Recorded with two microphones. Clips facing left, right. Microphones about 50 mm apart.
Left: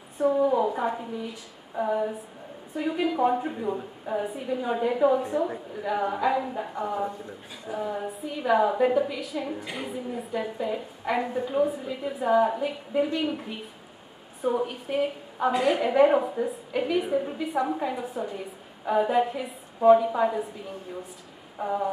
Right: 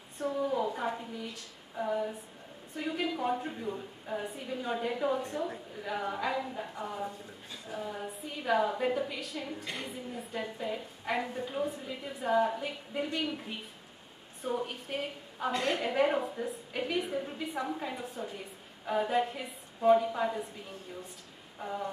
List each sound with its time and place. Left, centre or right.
0.2 s a woman's voice: centre
0.5 s a sound: centre
1.8 s a woman's voice: centre
8.1 s a woman's voice: centre
8.4 s a woman's voice: centre
21.5 s speech: centre